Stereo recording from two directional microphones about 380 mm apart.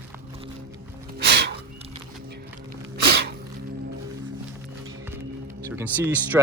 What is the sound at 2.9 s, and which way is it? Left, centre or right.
Sneeze, right.